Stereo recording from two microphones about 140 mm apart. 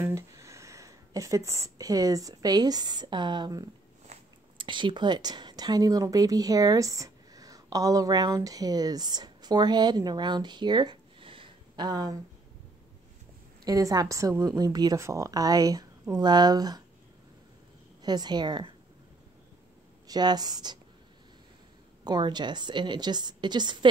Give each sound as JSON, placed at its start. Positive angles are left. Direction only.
{"t": 0.0, "sound": "speech", "side_deg": -20}
{"t": 4.1, "sound": "biting", "side_deg": -50}
{"t": 4.6, "sound": "speech", "side_deg": -35}
{"t": 13.7, "sound": "a woman's voice", "side_deg": -25}
{"t": 18.0, "sound": "a woman's voice", "side_deg": -30}
{"t": 20.1, "sound": "a woman's voice", "side_deg": -30}
{"t": 22.0, "sound": "a woman's voice", "side_deg": -30}